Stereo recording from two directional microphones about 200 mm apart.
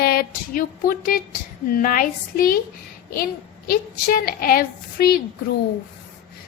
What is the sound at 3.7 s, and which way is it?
Speech, 50° left (ahead or behind).